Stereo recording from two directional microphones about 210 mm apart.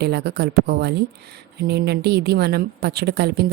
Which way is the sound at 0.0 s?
50° right (ahead or behind).